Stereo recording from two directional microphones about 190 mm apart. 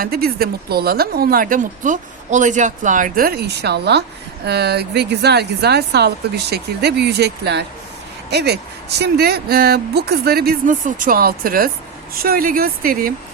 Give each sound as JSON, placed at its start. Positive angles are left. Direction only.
{"t": 0.0, "sound": "speech", "side_deg": -55}